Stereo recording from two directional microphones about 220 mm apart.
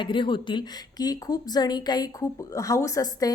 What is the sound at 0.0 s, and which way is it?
A woman's voice, 20° left (ahead or behind).